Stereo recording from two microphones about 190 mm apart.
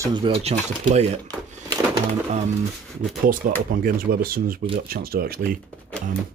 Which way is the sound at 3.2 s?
45° right (ahead or behind).